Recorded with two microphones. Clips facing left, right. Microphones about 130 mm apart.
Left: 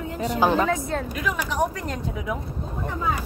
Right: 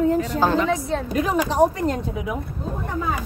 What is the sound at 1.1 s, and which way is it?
Speech, 35° right (ahead or behind).